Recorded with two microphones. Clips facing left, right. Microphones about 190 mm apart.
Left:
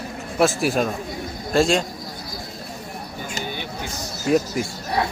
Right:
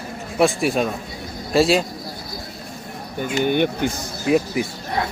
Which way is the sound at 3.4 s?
60° right (ahead or behind).